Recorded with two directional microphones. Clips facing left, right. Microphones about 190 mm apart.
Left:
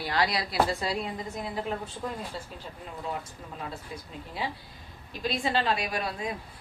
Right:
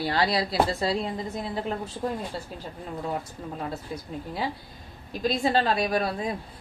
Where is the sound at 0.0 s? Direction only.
30° right (ahead or behind).